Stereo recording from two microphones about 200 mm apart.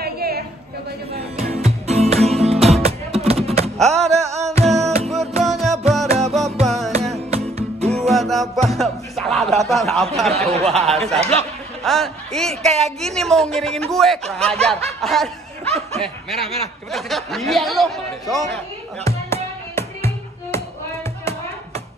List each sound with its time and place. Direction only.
0.0 s a sound: 50° right (ahead or behind)
1.4 s music: 30° right (ahead or behind)
3.7 s music: centre (ahead or behind)
4.1 s music: 15° right (ahead or behind)
4.6 s music: centre (ahead or behind)
7.0 s music: 30° right (ahead or behind)
8.1 s music: centre (ahead or behind)
9.6 s speech: centre (ahead or behind)
10.3 s speech: 30° right (ahead or behind)
11.8 s speech: centre (ahead or behind)
15.6 s snicker: 30° right (ahead or behind)
16.0 s speech: centre (ahead or behind)
19.3 s music: 15° left (ahead or behind)